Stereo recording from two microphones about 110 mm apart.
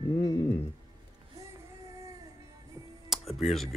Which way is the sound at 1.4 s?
30° right (ahead or behind).